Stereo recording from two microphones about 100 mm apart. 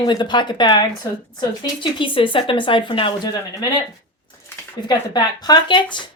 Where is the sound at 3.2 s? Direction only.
40° left (ahead or behind).